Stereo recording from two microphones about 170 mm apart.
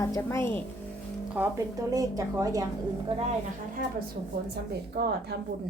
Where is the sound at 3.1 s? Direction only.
35° right (ahead or behind).